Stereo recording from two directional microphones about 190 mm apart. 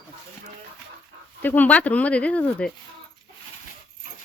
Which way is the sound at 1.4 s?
10° left (ahead or behind).